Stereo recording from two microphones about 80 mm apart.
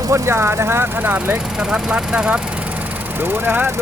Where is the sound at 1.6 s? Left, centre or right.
Centre.